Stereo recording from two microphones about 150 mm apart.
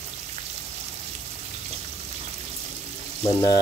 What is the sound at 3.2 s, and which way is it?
Speech, 25° left (ahead or behind).